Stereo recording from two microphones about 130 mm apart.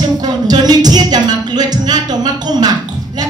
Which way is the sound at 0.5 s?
30° right (ahead or behind).